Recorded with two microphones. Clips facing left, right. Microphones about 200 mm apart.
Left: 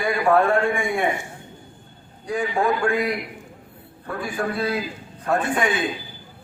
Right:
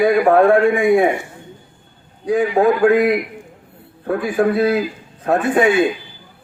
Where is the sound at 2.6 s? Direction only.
35° right (ahead or behind).